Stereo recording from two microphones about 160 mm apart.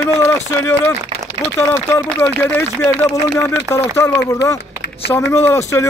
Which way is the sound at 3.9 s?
15° left (ahead or behind).